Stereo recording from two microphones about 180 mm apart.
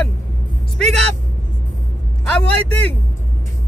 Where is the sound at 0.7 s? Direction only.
5° left (ahead or behind).